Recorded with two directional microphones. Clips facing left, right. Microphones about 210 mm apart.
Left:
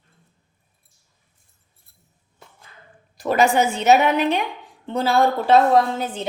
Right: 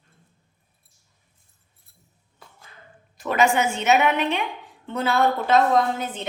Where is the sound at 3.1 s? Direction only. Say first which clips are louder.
Left 3 dB; 35° left (ahead or behind).